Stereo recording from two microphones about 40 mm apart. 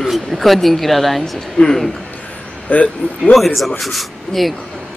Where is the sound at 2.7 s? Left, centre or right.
Left.